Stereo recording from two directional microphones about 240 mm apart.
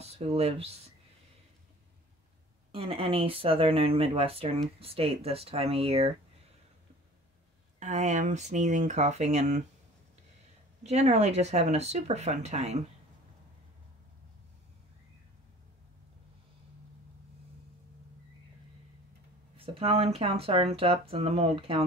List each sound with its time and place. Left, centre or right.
0.0 s speech: right
2.7 s speech: right
7.8 s speech: right
10.8 s speech: right
19.5 s speech: right